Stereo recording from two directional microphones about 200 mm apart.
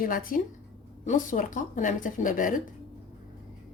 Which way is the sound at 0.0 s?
45° left (ahead or behind).